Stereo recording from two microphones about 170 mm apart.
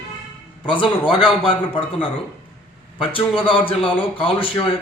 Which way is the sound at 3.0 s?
30° left (ahead or behind).